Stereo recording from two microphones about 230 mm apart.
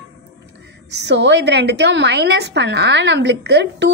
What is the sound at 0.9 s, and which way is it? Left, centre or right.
A woman's voice, right.